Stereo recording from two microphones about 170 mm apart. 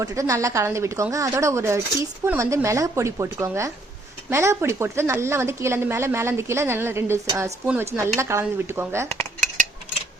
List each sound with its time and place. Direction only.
0.0 s speech: 20° right (ahead or behind)